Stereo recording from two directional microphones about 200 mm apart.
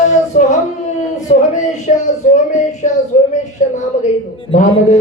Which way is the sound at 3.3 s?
35° left (ahead or behind).